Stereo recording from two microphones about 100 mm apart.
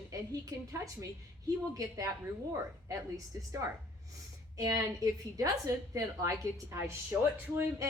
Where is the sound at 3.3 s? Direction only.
35° right (ahead or behind).